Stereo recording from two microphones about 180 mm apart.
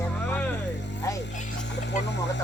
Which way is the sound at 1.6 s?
75° left (ahead or behind).